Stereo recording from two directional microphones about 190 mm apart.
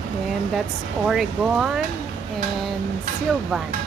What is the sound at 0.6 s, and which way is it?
Speech, centre (ahead or behind).